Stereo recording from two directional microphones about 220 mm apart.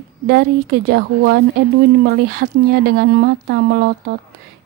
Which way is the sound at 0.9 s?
45° right (ahead or behind).